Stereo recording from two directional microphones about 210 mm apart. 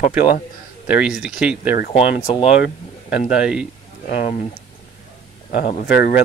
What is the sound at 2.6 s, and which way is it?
Speech, 45° left (ahead or behind).